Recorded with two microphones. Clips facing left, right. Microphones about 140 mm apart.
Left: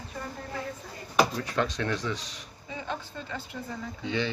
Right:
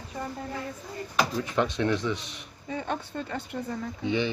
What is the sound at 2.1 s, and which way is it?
A man's voice, 60° right (ahead or behind).